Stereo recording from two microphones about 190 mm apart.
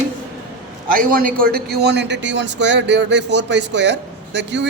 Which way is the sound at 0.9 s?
45° right (ahead or behind).